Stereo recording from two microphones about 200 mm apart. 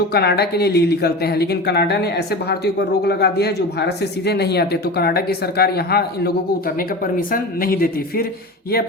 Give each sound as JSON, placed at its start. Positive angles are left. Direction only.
{"t": 0.1, "sound": "speech", "side_deg": 55}